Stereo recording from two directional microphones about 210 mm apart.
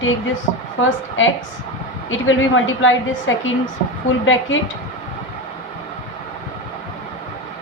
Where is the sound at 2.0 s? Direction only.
65° left (ahead or behind).